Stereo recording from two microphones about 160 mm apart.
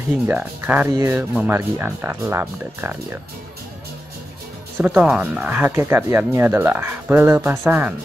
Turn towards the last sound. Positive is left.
turn(degrees=-10)  # may be behind; listen again after turning